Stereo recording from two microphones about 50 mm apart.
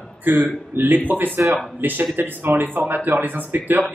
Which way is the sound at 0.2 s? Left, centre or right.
Right.